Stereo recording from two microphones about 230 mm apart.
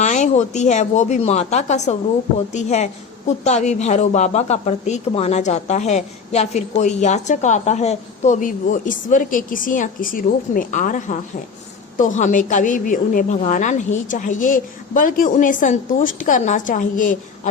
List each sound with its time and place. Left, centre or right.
0.0 s a woman's voice: left